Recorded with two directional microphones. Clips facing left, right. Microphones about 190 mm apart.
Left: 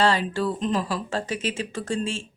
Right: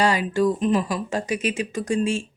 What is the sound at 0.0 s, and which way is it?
Speech, 10° right (ahead or behind).